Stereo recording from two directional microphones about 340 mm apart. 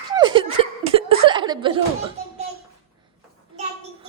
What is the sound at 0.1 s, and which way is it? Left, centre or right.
Chuckle, centre.